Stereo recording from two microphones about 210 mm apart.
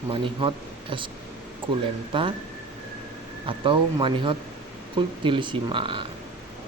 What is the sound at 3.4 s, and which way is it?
Speech, 25° right (ahead or behind).